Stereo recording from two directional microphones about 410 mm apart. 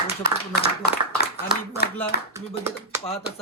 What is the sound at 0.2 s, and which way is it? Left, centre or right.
Speech, left.